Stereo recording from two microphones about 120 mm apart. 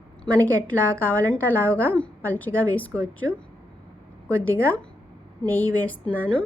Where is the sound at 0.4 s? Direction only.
15° left (ahead or behind).